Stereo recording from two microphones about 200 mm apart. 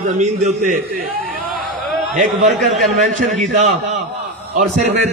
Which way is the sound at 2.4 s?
Centre (ahead or behind).